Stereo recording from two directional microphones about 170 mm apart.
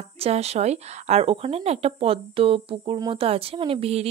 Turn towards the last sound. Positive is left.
turn(degrees=-35)  # may be behind; listen again after turning